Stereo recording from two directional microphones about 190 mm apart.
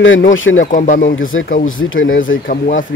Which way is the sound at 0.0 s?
90° left.